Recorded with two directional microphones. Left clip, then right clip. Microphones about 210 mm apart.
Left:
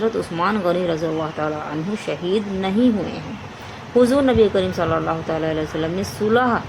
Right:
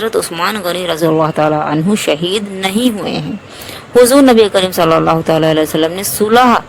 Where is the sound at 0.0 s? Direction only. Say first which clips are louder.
Right 6 dB; 50° right (ahead or behind).